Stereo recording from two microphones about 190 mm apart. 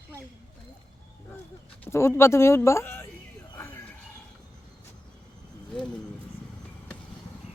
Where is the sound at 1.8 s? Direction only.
15° left (ahead or behind).